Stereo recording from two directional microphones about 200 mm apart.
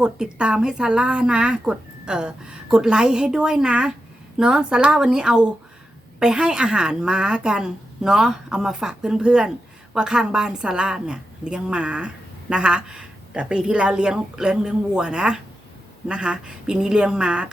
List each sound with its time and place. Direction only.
0.0 s a woman's voice: 5° right (ahead or behind)